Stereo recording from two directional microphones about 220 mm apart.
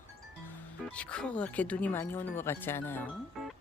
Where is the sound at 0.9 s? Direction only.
5° left (ahead or behind).